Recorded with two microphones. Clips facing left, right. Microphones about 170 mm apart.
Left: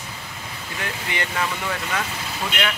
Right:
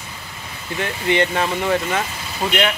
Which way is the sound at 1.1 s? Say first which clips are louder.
Right 9 dB; 25° right (ahead or behind).